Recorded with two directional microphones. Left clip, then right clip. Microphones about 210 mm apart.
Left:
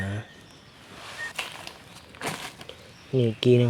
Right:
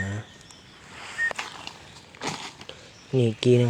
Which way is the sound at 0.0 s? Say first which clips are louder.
Right 1 dB; 5° left (ahead or behind).